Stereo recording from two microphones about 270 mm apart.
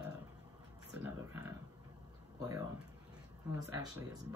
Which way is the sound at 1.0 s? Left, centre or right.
Centre.